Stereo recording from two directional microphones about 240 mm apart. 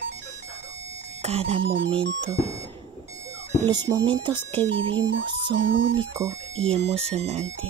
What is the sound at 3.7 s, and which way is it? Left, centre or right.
Speech, centre.